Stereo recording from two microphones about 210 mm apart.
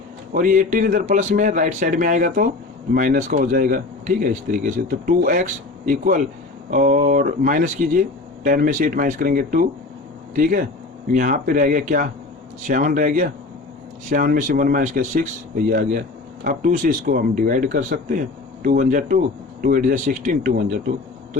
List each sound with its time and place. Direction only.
0.3 s speech: 40° right (ahead or behind)